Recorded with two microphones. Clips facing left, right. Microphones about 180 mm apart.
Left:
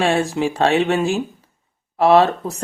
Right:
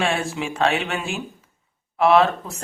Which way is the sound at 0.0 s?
35° left (ahead or behind).